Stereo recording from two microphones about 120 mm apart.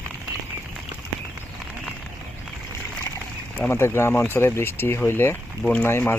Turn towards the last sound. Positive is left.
turn(degrees=20)  # may be behind; listen again after turning